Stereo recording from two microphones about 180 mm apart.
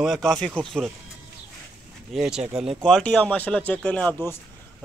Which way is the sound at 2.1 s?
Centre (ahead or behind).